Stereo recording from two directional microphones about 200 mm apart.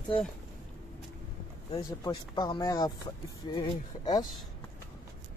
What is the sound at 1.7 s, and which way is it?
Speech, 20° left (ahead or behind).